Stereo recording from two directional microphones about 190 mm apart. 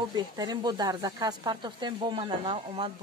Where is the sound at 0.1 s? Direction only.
20° right (ahead or behind).